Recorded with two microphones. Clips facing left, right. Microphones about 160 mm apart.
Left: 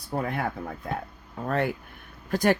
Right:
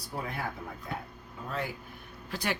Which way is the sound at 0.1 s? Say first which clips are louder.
Left 8 dB; 55° left (ahead or behind).